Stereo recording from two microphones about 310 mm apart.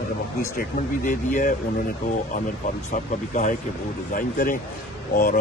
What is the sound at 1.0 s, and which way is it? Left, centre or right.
Speech, left.